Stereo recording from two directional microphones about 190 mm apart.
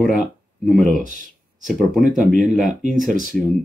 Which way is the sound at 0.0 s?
Centre (ahead or behind).